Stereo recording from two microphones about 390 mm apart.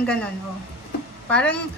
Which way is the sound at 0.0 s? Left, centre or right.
Centre.